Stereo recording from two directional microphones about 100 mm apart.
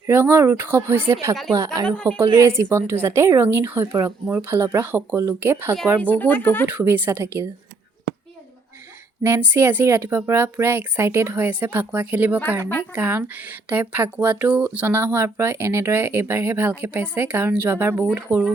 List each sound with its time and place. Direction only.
0.0 s speech: 20° right (ahead or behind)
1.9 s a woman's voice: 15° left (ahead or behind)
2.1 s speech: 25° right (ahead or behind)
6.0 s speech: 15° left (ahead or behind)
6.7 s speech: 20° right (ahead or behind)
9.2 s speech: 20° right (ahead or behind)